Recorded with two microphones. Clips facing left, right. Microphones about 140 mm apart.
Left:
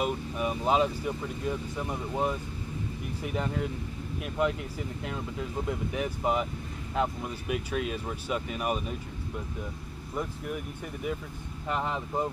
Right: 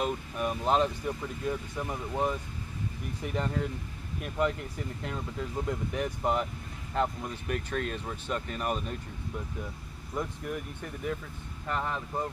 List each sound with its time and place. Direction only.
0.0 s speech: 5° left (ahead or behind)
10.1 s speech: 5° left (ahead or behind)